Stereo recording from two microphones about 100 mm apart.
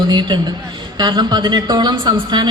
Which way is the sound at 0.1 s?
50° right (ahead or behind).